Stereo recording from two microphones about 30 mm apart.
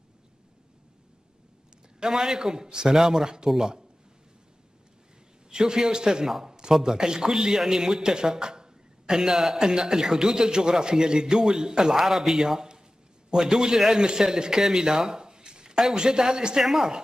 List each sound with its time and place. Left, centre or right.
2.0 s a man's voice: right
5.5 s a man's voice: right